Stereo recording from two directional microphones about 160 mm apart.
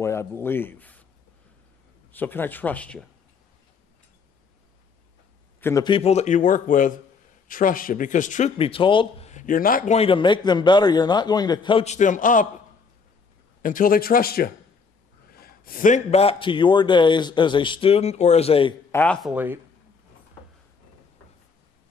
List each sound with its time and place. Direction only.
0.0 s speech: 15° left (ahead or behind)
2.1 s speech: 10° left (ahead or behind)
5.6 s a man's voice: 15° left (ahead or behind)
5.9 s a man's voice: 40° left (ahead or behind)
9.3 s speech: 55° left (ahead or behind)
9.9 s a man's voice: 35° left (ahead or behind)
11.8 s a man's voice: 50° left (ahead or behind)
13.6 s a man's voice: 55° left (ahead or behind); by 18.8 s 35° left (ahead or behind)
18.9 s speech: 10° left (ahead or behind)
19.3 s speech: 10° right (ahead or behind)